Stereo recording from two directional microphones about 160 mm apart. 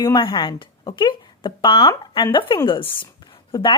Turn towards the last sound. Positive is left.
turn(degrees=30)  # may be behind; listen again after turning